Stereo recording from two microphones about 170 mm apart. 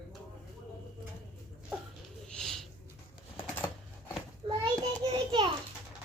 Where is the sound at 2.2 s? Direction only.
5° left (ahead or behind).